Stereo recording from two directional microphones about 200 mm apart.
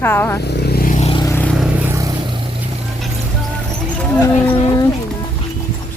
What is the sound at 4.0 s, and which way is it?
Speech, 10° left (ahead or behind).